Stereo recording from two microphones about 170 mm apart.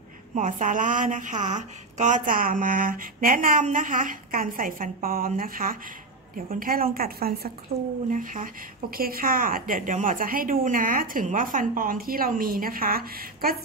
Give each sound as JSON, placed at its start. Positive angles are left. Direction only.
{"t": 0.4, "sound": "a woman's voice", "side_deg": -45}
{"t": 8.1, "sound": "a woman's voice", "side_deg": -50}